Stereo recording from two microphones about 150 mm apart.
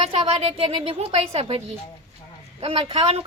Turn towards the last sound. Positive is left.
turn(degrees=-45)  # may be behind; listen again after turning